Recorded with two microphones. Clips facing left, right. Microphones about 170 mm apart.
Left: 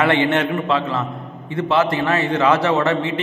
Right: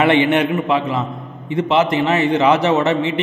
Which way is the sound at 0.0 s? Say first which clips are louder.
Right 3 dB; 20° right (ahead or behind).